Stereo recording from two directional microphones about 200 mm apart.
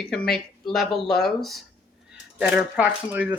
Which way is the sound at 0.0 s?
5° left (ahead or behind).